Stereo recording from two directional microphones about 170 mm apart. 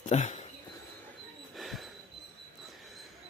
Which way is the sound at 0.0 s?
45° left (ahead or behind).